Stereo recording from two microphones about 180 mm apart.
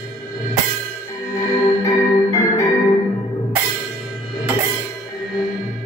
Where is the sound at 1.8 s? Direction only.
15° left (ahead or behind).